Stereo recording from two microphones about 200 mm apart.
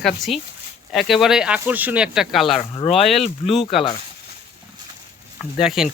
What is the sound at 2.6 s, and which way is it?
Speech, 30° left (ahead or behind).